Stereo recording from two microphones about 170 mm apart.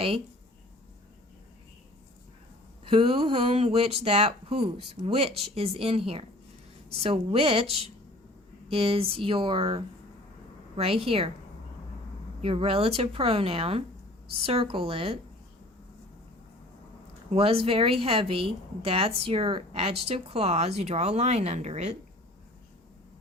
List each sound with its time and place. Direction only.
2.9 s a woman's voice: 35° right (ahead or behind)
8.7 s a woman's voice: 35° right (ahead or behind)
12.4 s a woman's voice: 35° right (ahead or behind)
17.3 s a woman's voice: 35° right (ahead or behind)